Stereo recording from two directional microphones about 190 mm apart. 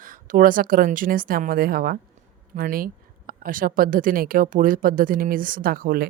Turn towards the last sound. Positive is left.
turn(degrees=-50)  # may be behind; listen again after turning